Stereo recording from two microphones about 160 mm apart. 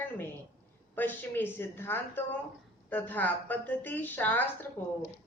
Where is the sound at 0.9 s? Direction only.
10° left (ahead or behind).